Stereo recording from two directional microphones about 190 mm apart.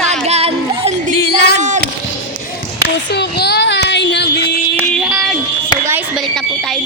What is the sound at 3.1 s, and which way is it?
Child singing, 60° left (ahead or behind).